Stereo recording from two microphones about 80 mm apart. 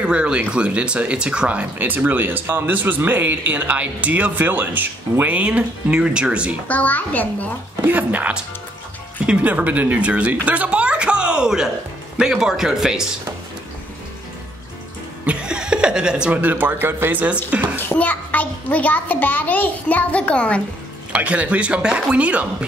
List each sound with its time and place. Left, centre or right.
0.0 s speech: centre
6.7 s a child's voice: left
7.8 s speech: centre
15.2 s speech: centre
17.7 s a child's voice: left
21.1 s speech: centre